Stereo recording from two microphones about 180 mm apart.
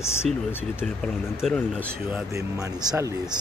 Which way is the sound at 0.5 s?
10° left (ahead or behind).